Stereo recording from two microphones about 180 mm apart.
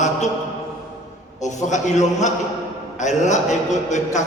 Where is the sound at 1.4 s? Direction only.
40° left (ahead or behind).